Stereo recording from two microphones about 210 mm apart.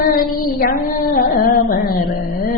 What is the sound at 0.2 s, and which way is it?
Female singing, 45° left (ahead or behind).